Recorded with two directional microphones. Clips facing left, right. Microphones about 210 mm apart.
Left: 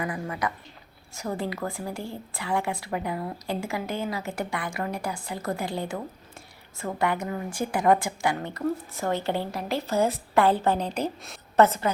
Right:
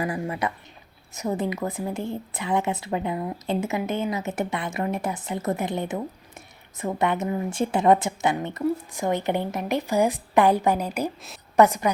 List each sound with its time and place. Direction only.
0.0 s a woman's voice: 25° right (ahead or behind)